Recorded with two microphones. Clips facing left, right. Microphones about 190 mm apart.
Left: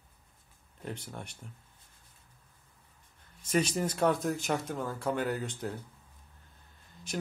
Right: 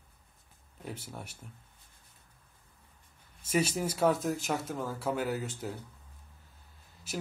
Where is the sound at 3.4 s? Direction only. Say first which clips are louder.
Left 1 dB; 5° right (ahead or behind).